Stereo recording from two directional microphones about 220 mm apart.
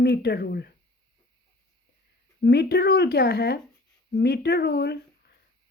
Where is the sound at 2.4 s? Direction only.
45° left (ahead or behind).